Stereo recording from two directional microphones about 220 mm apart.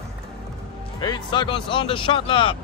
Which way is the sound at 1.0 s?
20° left (ahead or behind).